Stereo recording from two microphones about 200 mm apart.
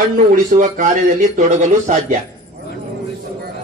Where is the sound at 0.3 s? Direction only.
40° right (ahead or behind).